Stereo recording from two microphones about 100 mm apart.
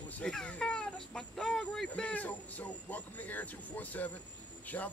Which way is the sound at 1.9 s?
15° left (ahead or behind).